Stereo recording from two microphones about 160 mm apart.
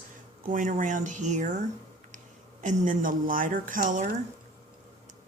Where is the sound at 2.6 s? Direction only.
50° right (ahead or behind).